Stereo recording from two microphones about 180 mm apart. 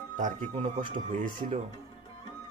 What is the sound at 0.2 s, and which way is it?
Speech, 45° right (ahead or behind).